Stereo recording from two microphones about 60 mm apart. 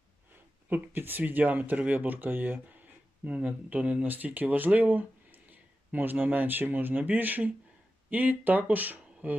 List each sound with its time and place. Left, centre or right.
0.7 s speech: right